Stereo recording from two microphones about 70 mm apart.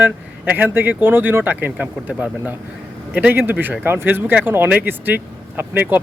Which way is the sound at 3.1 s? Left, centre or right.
Right.